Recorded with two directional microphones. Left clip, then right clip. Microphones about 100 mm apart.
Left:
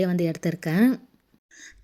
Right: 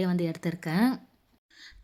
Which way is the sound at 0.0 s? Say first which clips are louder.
Left 5 dB; 30° left (ahead or behind).